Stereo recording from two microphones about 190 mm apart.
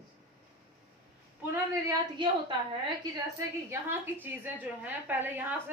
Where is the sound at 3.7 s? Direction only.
10° right (ahead or behind).